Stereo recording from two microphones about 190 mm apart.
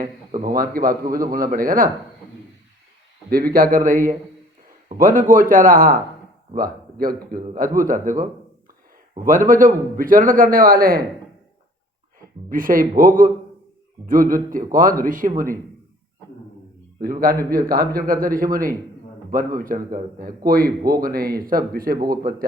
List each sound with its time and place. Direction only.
0.4 s a man's voice: 50° right (ahead or behind)
3.2 s a man's voice: 50° right (ahead or behind)
12.5 s a man's voice: 45° right (ahead or behind)
17.0 s a man's voice: 50° right (ahead or behind)